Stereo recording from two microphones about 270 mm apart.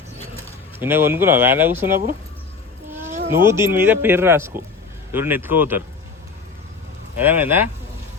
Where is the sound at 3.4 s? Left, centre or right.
Centre.